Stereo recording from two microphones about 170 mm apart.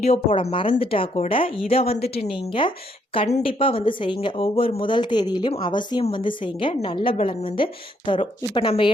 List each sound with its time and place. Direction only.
0.0 s a woman's voice: 40° left (ahead or behind)